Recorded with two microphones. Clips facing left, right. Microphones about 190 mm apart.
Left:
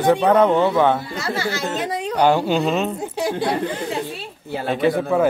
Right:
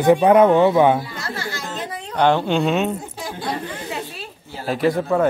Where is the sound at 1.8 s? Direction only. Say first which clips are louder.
Left 6 dB; 75° left (ahead or behind).